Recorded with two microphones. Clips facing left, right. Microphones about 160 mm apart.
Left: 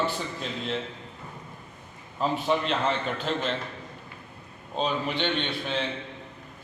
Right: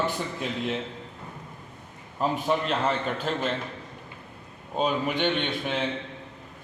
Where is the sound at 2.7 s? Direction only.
5° right (ahead or behind).